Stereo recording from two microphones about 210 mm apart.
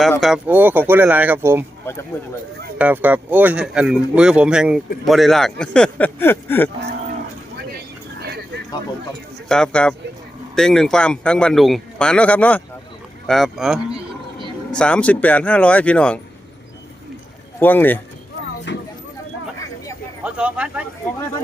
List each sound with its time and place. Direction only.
0.2 s speech: 5° right (ahead or behind)
2.7 s a man's voice: 5° right (ahead or behind); by 6.7 s 10° left (ahead or behind)
9.5 s a man's voice: 5° left (ahead or behind)
17.6 s speech: 10° left (ahead or behind)
18.7 s speech: 55° left (ahead or behind)
20.2 s a sound: 5° right (ahead or behind)